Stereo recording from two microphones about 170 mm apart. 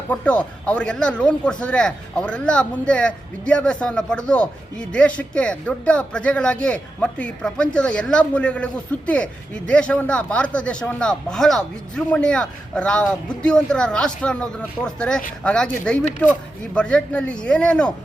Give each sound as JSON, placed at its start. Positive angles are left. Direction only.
{"t": 0.1, "sound": "speech", "side_deg": 10}